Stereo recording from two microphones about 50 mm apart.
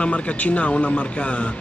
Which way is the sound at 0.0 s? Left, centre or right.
Left.